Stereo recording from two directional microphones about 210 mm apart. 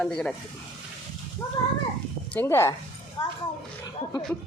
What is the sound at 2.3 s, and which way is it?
Speech, 10° left (ahead or behind).